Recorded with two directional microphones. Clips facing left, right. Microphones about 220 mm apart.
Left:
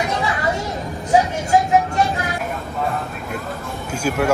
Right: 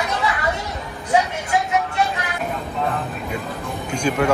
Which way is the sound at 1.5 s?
40° left (ahead or behind).